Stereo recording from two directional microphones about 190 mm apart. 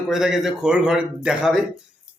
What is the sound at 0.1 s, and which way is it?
A man's voice, centre (ahead or behind).